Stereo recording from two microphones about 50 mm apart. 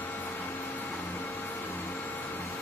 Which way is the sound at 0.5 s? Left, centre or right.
Left.